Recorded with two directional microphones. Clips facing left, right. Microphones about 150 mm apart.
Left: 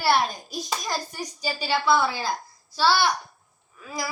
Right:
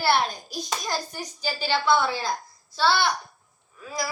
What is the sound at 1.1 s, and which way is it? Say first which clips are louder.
A woman's voice: left 1 dB; 5° left (ahead or behind).